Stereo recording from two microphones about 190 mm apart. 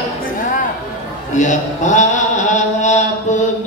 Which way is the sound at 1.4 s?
40° left (ahead or behind).